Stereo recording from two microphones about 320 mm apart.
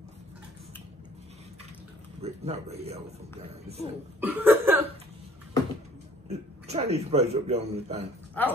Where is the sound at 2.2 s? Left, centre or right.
Centre.